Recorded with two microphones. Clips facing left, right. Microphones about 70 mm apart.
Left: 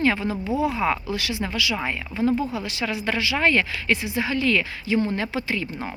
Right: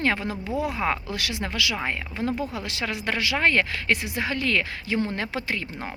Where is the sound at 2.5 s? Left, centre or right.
Right.